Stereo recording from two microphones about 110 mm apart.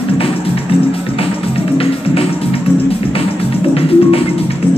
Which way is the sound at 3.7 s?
60° left (ahead or behind).